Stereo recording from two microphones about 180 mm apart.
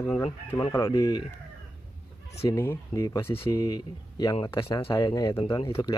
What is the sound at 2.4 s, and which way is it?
Speech, 15° left (ahead or behind).